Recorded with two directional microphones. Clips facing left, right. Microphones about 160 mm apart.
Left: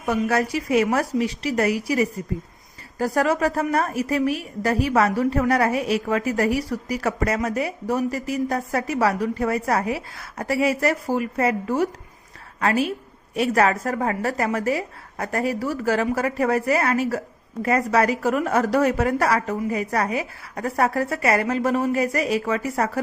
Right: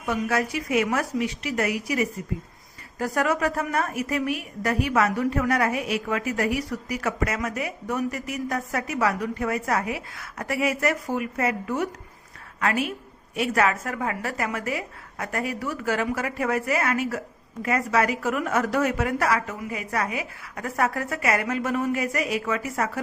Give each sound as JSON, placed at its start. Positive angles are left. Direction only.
{"t": 0.0, "sound": "a woman's voice", "side_deg": 40}